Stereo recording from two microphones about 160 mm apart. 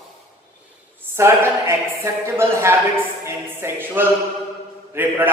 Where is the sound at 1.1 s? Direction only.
15° right (ahead or behind).